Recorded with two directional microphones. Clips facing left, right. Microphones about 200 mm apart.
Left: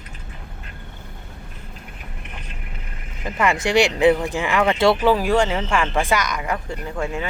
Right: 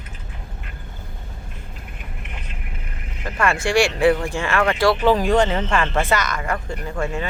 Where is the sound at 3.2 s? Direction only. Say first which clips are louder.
Left 1 dB; 15° left (ahead or behind).